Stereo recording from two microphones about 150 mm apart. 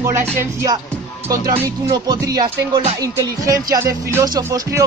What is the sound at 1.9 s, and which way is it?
Speech, 25° right (ahead or behind).